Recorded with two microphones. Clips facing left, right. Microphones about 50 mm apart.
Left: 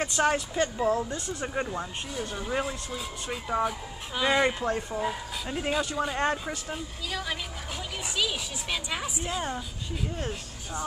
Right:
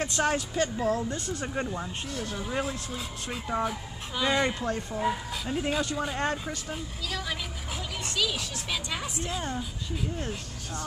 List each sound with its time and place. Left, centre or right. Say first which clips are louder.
0.0 s speech: left 2 dB; centre